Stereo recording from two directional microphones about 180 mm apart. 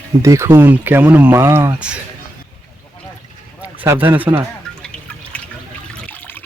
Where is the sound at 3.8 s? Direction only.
10° right (ahead or behind).